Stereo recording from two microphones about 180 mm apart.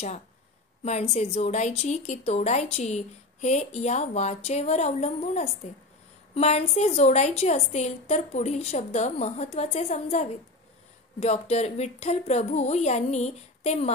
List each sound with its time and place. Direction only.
0.8 s speech: 35° left (ahead or behind)